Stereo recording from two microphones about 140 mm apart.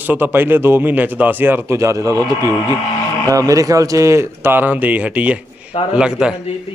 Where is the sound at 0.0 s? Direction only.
15° right (ahead or behind).